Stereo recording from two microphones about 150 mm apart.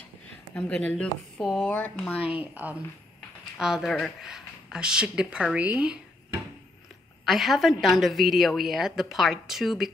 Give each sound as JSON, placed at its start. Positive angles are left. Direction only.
{"t": 0.6, "sound": "speech", "side_deg": 5}
{"t": 2.1, "sound": "a woman's voice", "side_deg": 40}
{"t": 2.5, "sound": "a woman's voice", "side_deg": -10}
{"t": 7.2, "sound": "a woman's voice", "side_deg": 0}